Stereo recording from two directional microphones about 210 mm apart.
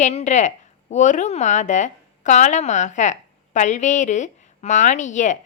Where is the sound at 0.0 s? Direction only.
35° left (ahead or behind).